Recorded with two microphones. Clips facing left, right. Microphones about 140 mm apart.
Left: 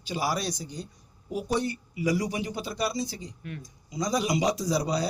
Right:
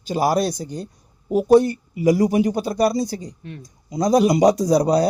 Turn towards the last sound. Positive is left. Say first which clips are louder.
# right 11 dB
turn(degrees=-50)  # may be behind; listen again after turning